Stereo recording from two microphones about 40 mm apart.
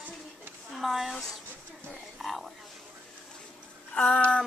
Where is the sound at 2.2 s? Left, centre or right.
Centre.